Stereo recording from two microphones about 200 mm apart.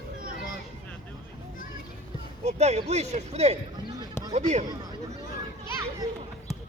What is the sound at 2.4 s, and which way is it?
Speech, 35° right (ahead or behind).